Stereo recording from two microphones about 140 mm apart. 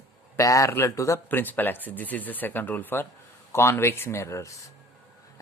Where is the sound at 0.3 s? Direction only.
25° left (ahead or behind).